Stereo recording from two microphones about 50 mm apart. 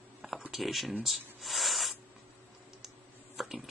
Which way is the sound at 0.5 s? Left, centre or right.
Centre.